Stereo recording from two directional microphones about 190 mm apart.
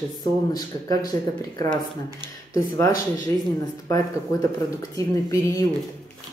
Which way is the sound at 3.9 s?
20° left (ahead or behind).